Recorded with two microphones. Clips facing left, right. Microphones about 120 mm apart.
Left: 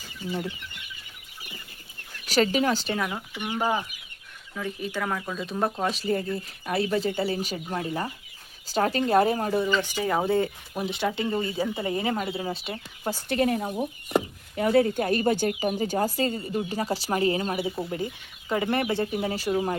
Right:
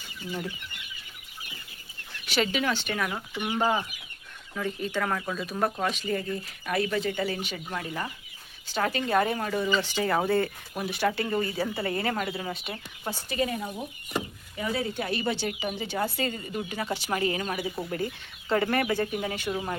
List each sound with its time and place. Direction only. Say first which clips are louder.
0.3 s speech: left 3 dB; 25° left (ahead or behind)
2.2 s speech: left 4 dB; 40° left (ahead or behind)
2.9 s speech: left 2 dB; 20° left (ahead or behind)
3.6 s speech: even; 5° left (ahead or behind)
5.5 s speech: left 2 dB; 20° left (ahead or behind)
5.9 s speech: left 3 dB; 35° left (ahead or behind)
9.8 s speech: left 1 dB; 10° left (ahead or behind); by 12.7 s 25° left (ahead or behind)
13.2 s speech: left 5 dB; 60° left (ahead or behind); by 17.7 s 25° left (ahead or behind)
17.9 s speech: even; 15° left (ahead or behind)
18.7 s speech: left 1 dB; 25° left (ahead or behind)